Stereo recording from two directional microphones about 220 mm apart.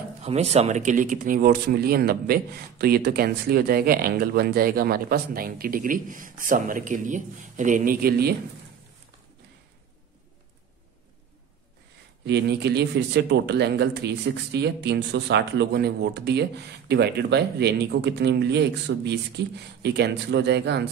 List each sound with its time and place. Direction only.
0.2 s speech: 30° right (ahead or behind); by 8.4 s 45° right (ahead or behind)
12.3 s speech: 50° right (ahead or behind)